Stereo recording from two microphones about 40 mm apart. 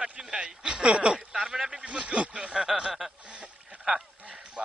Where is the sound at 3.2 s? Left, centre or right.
Right.